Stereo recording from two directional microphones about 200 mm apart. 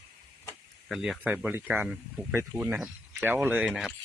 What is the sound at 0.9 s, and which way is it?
Speech, centre (ahead or behind).